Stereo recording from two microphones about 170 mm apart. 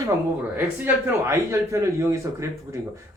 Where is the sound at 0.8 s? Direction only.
15° right (ahead or behind).